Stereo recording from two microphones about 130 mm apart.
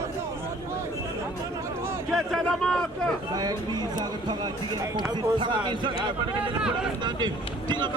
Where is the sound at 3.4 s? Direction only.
30° right (ahead or behind).